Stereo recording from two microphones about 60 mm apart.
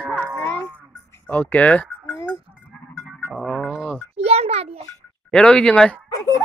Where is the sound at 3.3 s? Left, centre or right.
Centre.